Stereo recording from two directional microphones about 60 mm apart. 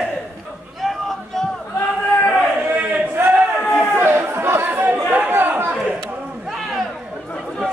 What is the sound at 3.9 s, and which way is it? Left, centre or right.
Chatter, right.